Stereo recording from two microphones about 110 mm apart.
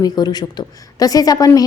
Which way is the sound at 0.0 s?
40° left (ahead or behind).